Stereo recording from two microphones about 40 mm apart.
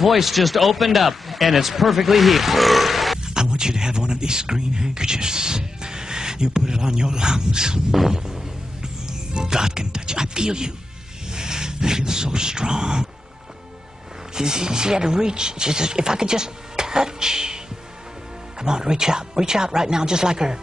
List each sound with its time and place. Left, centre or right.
0.0 s speech: centre
3.3 s speech: centre
14.3 s speech: centre
18.6 s speech: centre